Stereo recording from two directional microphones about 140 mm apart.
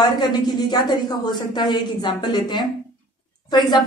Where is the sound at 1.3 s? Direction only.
30° left (ahead or behind).